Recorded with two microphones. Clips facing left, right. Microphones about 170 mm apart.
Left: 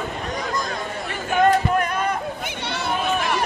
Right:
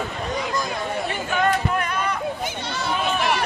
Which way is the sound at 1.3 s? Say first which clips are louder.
Left 5 dB; 45° left (ahead or behind).